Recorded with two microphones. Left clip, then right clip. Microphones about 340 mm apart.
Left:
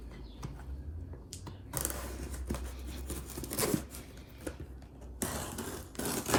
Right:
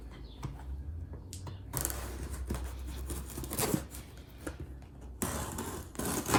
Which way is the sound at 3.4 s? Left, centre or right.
Centre.